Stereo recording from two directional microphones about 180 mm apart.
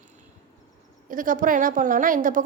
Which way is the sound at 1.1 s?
50° right (ahead or behind).